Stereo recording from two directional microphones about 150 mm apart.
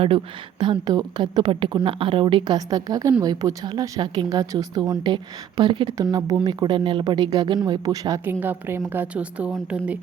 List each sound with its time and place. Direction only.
0.6 s a woman's voice: 30° right (ahead or behind)
8.2 s a woman's voice: 15° right (ahead or behind)